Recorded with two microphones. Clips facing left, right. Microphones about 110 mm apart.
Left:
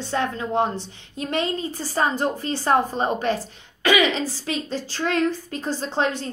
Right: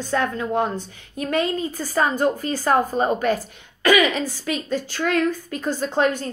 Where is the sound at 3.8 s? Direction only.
25° left (ahead or behind).